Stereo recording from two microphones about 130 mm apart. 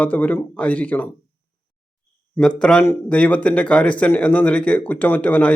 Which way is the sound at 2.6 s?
5° left (ahead or behind).